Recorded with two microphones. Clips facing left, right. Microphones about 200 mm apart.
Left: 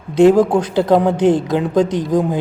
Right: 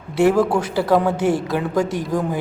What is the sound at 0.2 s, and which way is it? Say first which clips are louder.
A woman's voice: left 5 dB; 20° left (ahead or behind).